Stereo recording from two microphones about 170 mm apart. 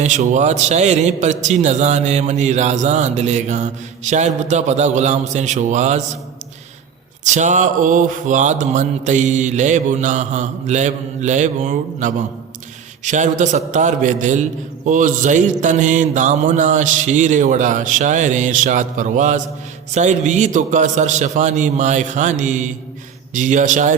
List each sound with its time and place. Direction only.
0.0 s a man's voice: 45° right (ahead or behind)
7.3 s a man's voice: 45° right (ahead or behind)